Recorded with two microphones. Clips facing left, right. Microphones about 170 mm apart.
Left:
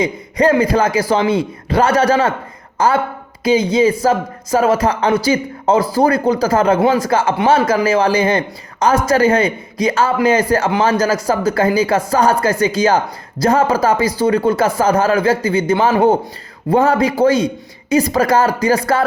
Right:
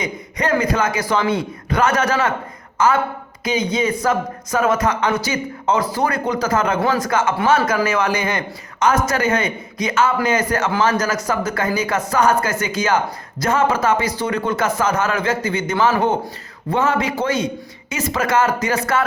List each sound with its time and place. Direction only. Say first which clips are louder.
0.0 s speech: left 9 dB; 30° left (ahead or behind)